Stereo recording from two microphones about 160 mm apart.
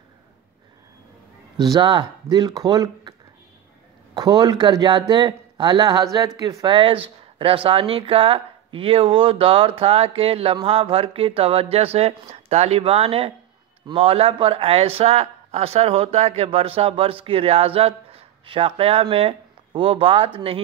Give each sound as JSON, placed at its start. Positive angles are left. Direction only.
{"t": 1.6, "sound": "speech", "side_deg": -25}